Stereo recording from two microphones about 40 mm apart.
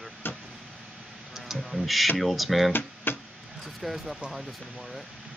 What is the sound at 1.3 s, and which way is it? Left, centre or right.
Music, centre.